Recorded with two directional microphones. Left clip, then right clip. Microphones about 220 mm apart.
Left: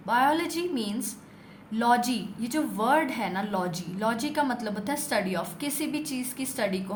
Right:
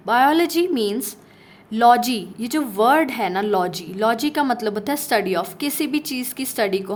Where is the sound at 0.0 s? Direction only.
45° right (ahead or behind).